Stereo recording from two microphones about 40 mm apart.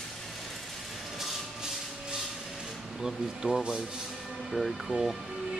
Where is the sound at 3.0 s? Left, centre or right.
Centre.